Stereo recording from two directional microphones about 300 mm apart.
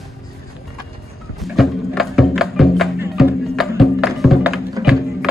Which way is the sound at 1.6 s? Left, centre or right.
Centre.